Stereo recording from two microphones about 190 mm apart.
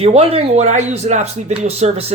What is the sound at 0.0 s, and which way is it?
Speech, 30° right (ahead or behind).